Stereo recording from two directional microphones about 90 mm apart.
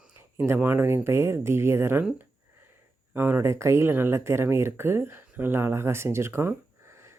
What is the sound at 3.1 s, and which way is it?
Speech, 25° right (ahead or behind).